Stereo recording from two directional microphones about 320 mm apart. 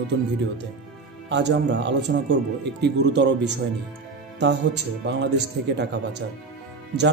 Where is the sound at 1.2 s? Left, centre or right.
Right.